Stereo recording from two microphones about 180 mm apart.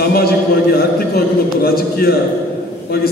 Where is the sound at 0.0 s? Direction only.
60° left (ahead or behind).